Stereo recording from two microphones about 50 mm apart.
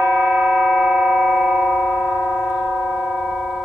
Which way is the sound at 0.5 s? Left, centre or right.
Centre.